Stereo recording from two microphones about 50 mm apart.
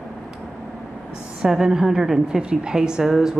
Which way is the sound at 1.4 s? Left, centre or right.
Centre.